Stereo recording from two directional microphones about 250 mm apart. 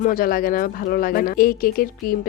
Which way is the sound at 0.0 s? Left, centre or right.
Left.